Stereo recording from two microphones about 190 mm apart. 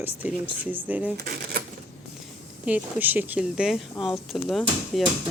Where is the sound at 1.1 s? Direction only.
55° right (ahead or behind).